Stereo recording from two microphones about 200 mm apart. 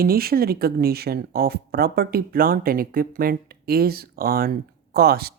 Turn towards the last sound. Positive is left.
turn(degrees=-50)  # may be behind; listen again after turning